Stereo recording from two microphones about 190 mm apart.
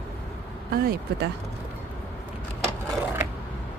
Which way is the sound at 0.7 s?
50° right (ahead or behind).